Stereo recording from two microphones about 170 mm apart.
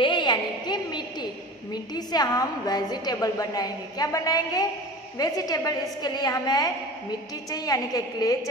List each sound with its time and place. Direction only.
0.0 s a woman's voice: 25° left (ahead or behind)